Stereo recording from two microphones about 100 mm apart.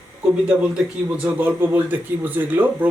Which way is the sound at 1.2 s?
20° right (ahead or behind).